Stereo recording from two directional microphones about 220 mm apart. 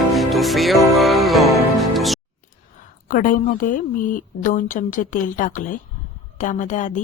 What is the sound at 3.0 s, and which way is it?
A woman's voice, 35° left (ahead or behind).